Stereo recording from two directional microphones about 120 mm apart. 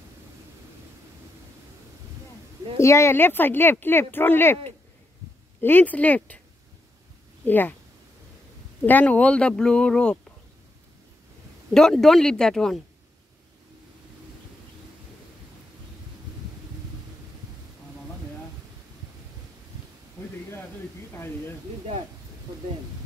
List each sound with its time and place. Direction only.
2.8 s speech: 25° left (ahead or behind)
5.6 s speech: 15° left (ahead or behind)
7.4 s speech: 15° left (ahead or behind)
8.8 s speech: 10° left (ahead or behind)
11.7 s speech: 5° left (ahead or behind)